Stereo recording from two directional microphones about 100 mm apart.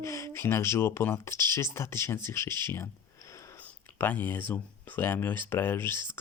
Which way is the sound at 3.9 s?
20° left (ahead or behind).